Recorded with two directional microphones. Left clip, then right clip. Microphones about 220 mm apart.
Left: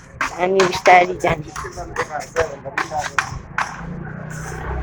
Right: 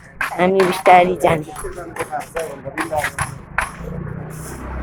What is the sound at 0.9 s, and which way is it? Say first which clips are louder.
Speech: right 2 dB; 10° right (ahead or behind).